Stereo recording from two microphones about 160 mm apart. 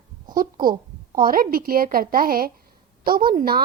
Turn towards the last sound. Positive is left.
turn(degrees=-70)  # may be behind; listen again after turning